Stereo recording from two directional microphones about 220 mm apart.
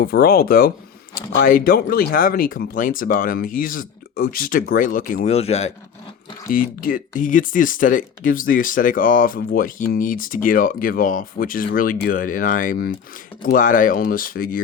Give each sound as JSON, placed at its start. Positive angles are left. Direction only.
{"t": 0.0, "sound": "speech", "side_deg": 45}
{"t": 6.5, "sound": "speech", "side_deg": 40}